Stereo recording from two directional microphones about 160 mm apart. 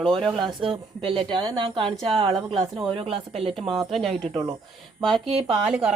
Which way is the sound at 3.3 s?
Centre (ahead or behind).